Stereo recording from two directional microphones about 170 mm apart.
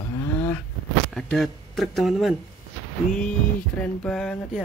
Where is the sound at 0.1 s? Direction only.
15° left (ahead or behind).